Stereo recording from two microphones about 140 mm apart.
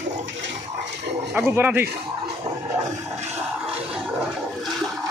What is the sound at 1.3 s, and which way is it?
Speech, 15° right (ahead or behind).